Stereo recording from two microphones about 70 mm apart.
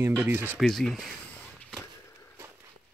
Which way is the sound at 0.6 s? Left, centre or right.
Centre.